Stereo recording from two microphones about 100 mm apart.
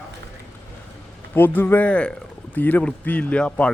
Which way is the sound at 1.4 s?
20° left (ahead or behind).